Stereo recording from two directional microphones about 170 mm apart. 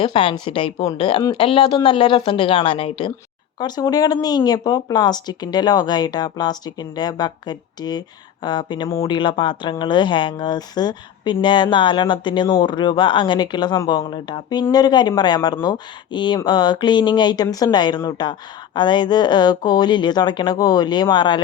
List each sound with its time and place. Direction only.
0.0 s a woman's voice: 30° left (ahead or behind)